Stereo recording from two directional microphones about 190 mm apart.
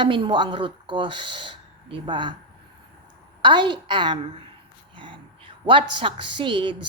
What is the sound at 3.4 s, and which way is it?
A woman's voice, 25° right (ahead or behind).